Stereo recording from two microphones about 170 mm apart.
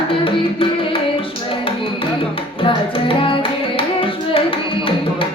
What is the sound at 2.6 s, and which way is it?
Carnatic music, 30° left (ahead or behind).